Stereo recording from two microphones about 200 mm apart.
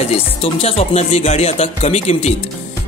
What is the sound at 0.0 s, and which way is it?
A man's voice, 30° left (ahead or behind).